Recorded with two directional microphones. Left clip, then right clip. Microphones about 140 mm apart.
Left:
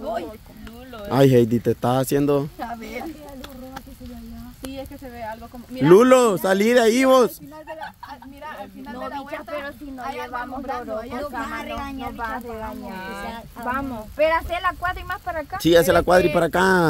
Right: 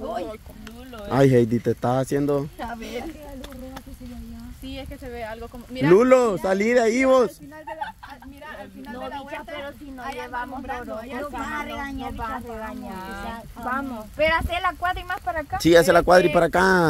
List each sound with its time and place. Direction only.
1.0 s speech: 15° left (ahead or behind)
2.7 s speech: centre (ahead or behind)
4.7 s speech: 65° right (ahead or behind)
5.9 s speech: 30° left (ahead or behind)
8.9 s speech: 5° left (ahead or behind)
11.3 s speech: 20° left (ahead or behind)
12.2 s speech: 15° left (ahead or behind)
12.8 s speech: 40° left (ahead or behind)
13.7 s speech: 15° left (ahead or behind)
14.1 s speech: 15° right (ahead or behind); by 15.4 s centre (ahead or behind)
15.6 s speech: 10° right (ahead or behind)